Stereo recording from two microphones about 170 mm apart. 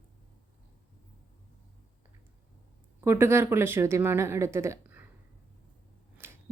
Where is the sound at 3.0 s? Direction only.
15° right (ahead or behind).